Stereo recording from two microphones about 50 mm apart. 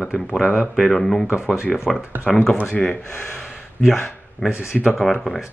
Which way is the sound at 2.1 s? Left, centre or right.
Right.